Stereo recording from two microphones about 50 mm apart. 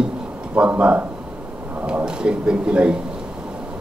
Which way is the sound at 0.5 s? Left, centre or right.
Right.